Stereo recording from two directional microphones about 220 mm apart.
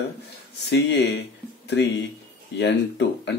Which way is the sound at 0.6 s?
50° left (ahead or behind).